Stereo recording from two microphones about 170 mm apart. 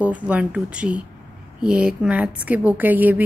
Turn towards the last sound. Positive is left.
turn(degrees=-10)  # may be behind; listen again after turning